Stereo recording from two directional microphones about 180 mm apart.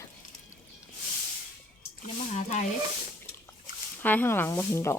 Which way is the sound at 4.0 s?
10° left (ahead or behind).